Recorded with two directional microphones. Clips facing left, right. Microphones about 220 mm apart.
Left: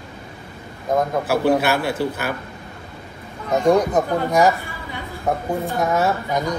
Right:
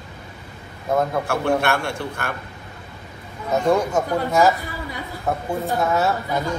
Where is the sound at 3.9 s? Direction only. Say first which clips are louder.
Left 2 dB; 20° left (ahead or behind).